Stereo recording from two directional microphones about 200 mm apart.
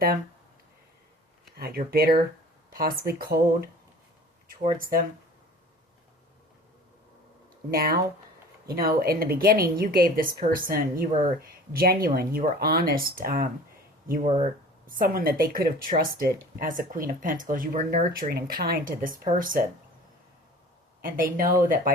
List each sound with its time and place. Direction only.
1.5 s speech: 50° right (ahead or behind)
7.7 s speech: 50° right (ahead or behind)
14.1 s speech: 35° right (ahead or behind)
14.8 s speech: 45° right (ahead or behind)
21.0 s speech: 45° right (ahead or behind)